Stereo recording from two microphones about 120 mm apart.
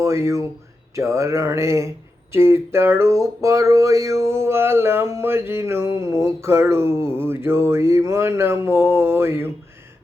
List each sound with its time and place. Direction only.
0.0 s speech: 25° right (ahead or behind)
0.9 s music: 25° right (ahead or behind)